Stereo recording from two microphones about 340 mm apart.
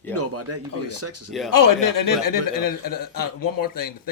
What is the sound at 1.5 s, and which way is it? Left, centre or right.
A man's voice, left.